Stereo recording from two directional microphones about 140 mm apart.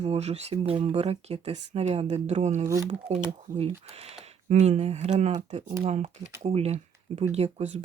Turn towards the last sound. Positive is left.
turn(degrees=-55)  # may be behind; listen again after turning